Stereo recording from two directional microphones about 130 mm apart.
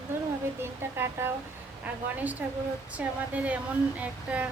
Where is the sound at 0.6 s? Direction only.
20° right (ahead or behind).